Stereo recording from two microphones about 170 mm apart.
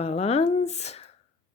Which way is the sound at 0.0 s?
35° left (ahead or behind).